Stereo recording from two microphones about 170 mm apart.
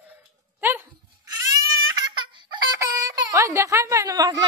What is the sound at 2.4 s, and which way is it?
Speech, 20° right (ahead or behind).